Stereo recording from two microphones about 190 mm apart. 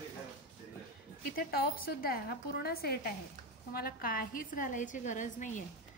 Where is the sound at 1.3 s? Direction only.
50° left (ahead or behind).